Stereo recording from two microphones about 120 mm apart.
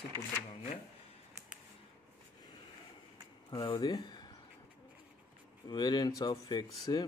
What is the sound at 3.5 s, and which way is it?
Speech, 40° left (ahead or behind).